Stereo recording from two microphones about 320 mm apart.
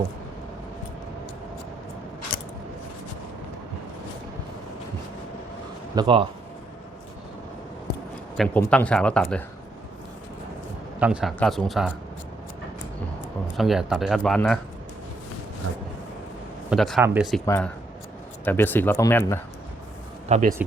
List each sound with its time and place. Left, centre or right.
5.9 s speech: centre
8.4 s speech: centre
11.0 s speech: centre
13.6 s speech: centre
16.6 s speech: centre
17.4 s speech: centre
20.2 s speech: right